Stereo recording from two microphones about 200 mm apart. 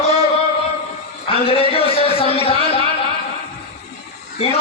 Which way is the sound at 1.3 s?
30° left (ahead or behind).